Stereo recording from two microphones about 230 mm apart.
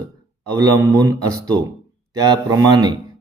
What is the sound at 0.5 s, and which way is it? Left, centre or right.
Speech, centre.